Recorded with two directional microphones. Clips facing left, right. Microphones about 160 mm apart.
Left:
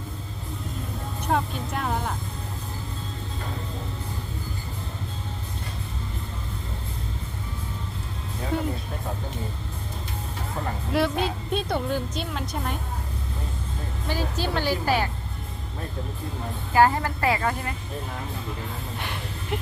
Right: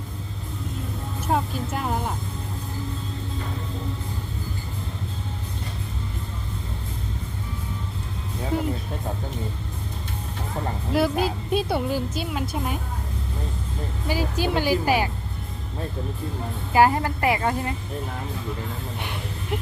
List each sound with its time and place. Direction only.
1.3 s a woman's voice: 5° right (ahead or behind)
10.9 s a woman's voice: 5° right (ahead or behind)
14.1 s speech: 10° right (ahead or behind)
16.7 s a woman's voice: 15° right (ahead or behind)